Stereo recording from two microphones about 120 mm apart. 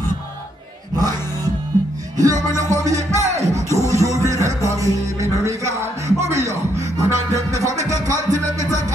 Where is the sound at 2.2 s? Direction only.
30° right (ahead or behind).